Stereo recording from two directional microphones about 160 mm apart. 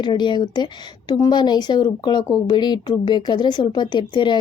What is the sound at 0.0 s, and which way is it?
A woman's voice, 30° left (ahead or behind).